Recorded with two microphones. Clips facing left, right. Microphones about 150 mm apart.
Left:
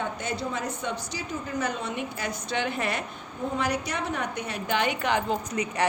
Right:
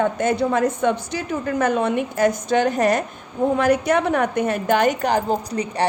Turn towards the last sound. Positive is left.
turn(degrees=-35)  # may be behind; listen again after turning